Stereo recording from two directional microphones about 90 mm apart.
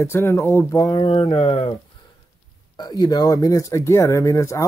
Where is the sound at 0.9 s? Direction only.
90° left.